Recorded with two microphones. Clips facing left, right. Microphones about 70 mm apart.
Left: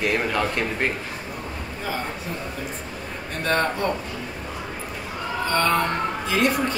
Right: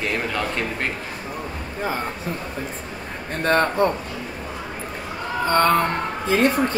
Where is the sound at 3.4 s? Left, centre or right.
Right.